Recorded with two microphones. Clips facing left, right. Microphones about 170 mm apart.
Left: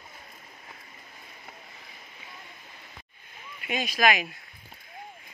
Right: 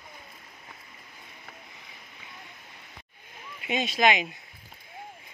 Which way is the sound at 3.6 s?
25° right (ahead or behind).